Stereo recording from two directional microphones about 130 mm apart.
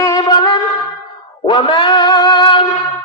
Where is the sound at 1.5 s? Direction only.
35° left (ahead or behind).